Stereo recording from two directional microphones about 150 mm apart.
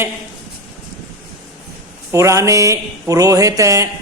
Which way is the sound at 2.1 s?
20° right (ahead or behind).